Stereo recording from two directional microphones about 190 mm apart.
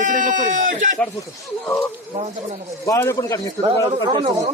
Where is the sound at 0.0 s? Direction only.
45° right (ahead or behind).